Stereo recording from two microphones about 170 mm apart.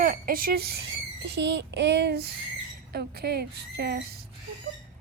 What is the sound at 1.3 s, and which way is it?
Speech, 90° right.